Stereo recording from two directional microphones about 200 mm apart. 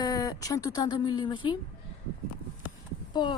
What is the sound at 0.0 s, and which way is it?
Speech, 15° left (ahead or behind).